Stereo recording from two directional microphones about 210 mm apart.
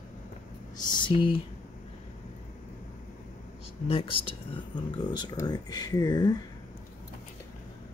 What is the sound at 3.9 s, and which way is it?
Speech, 25° left (ahead or behind).